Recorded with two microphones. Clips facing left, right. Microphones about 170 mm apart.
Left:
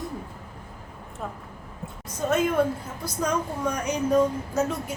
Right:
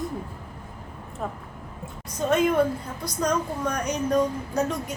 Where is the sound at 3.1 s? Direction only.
5° left (ahead or behind).